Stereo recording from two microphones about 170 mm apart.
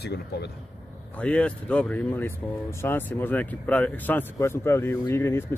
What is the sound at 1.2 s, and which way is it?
Speech, 5° left (ahead or behind).